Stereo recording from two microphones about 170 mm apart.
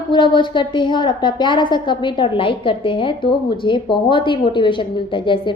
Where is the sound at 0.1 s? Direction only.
30° left (ahead or behind).